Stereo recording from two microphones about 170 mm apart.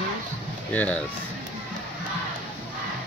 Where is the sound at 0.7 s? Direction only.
10° left (ahead or behind).